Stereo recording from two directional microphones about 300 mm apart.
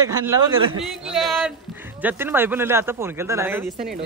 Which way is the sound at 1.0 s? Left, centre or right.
Centre.